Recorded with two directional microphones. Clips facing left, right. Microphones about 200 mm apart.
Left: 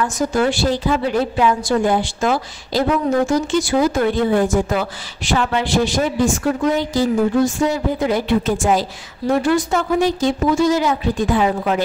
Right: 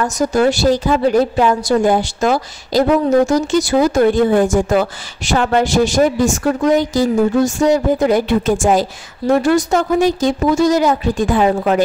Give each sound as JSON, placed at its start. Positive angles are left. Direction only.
{"t": 0.0, "sound": "a woman's voice", "side_deg": -40}